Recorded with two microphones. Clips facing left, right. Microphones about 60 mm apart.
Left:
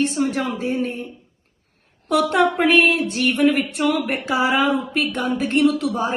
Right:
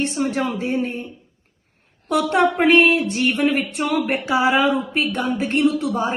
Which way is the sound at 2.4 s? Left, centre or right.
Right.